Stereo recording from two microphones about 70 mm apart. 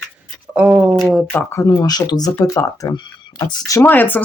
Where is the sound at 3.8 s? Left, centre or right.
Left.